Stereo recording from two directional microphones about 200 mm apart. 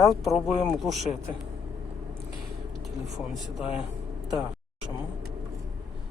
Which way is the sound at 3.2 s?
Centre (ahead or behind).